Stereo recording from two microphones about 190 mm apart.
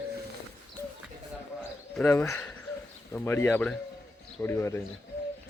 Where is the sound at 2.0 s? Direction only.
15° left (ahead or behind).